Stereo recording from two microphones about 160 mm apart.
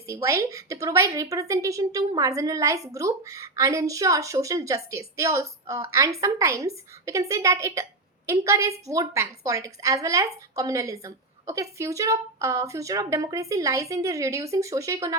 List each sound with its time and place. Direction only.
0.1 s a woman's voice: 20° right (ahead or behind)